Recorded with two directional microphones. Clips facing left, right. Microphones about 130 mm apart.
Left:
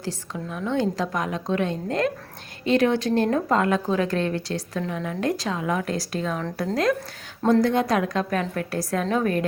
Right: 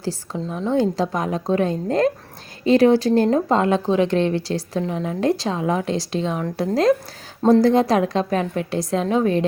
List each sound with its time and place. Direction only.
0.0 s a woman's voice: 30° right (ahead or behind)
7.6 s a woman's voice: 30° right (ahead or behind)